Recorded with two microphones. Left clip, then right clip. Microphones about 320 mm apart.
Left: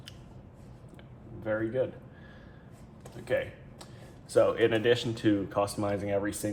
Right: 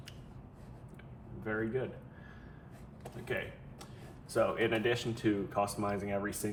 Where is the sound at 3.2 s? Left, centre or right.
Left.